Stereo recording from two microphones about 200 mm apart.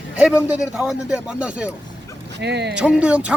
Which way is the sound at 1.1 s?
5° right (ahead or behind).